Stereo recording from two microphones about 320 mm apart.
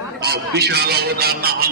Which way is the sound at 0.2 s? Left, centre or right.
Right.